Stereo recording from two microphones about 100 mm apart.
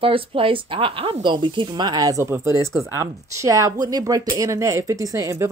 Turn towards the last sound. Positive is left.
turn(degrees=-35)  # may be behind; listen again after turning